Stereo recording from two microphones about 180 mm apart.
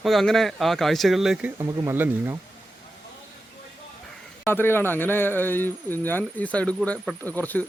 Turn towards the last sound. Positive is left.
turn(degrees=10)  # may be behind; listen again after turning